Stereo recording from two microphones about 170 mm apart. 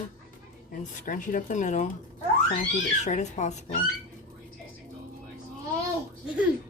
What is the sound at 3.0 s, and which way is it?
Speech, 45° left (ahead or behind).